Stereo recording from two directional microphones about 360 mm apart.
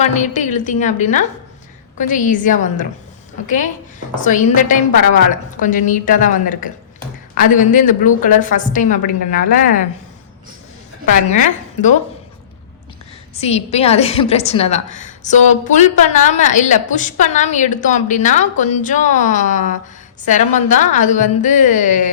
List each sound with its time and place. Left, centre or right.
0.0 s a woman's voice: centre
11.3 s a woman's voice: left
13.3 s a woman's voice: centre